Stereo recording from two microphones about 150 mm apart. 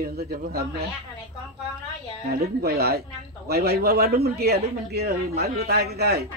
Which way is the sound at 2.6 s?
90° right.